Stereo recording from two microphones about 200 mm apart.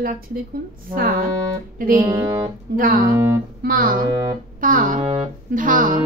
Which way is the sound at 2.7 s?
50° right (ahead or behind).